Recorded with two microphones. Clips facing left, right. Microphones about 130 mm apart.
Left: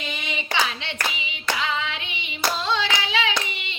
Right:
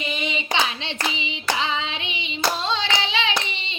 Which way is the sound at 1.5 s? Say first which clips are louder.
Even; 25° right (ahead or behind).